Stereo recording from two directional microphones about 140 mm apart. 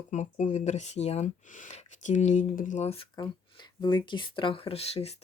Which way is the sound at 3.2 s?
30° left (ahead or behind).